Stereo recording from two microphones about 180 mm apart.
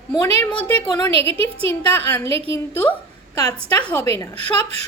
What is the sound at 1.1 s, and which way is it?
Speech, 30° right (ahead or behind).